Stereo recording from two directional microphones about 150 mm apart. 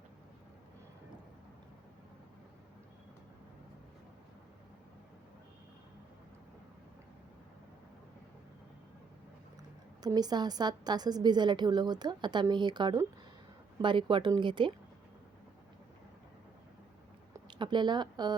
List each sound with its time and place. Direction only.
10.0 s a woman's voice: 25° right (ahead or behind)
17.5 s speech: 30° right (ahead or behind)